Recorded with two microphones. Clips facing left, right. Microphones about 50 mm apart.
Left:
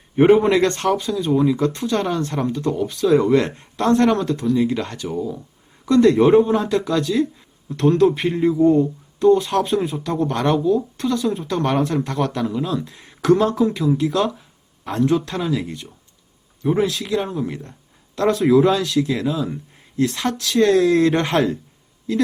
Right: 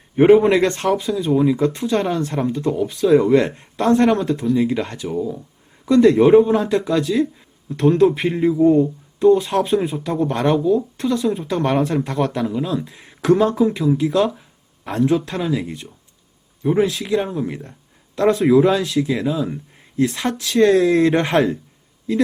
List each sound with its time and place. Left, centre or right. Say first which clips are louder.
0.2 s speech: right 2 dB; centre
0.5 s speech: right 1 dB; centre
5.0 s speech: right 2 dB; centre
16.8 s speech: right 2 dB; centre
17.5 s speech: right 1 dB; centre